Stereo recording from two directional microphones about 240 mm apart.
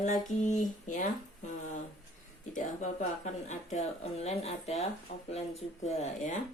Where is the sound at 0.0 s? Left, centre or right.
Left.